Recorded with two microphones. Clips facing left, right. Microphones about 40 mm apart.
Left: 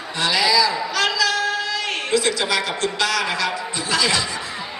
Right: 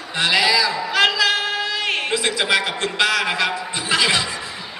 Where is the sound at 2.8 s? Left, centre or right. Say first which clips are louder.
Right 2 dB; right.